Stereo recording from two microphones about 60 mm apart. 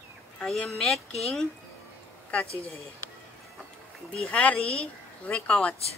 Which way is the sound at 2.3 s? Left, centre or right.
Left.